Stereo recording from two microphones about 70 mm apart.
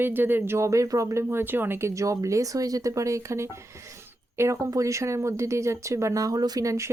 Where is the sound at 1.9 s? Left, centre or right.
Right.